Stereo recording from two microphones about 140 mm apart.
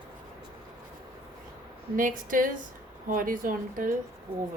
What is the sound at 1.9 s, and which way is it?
A woman's voice, 70° right (ahead or behind).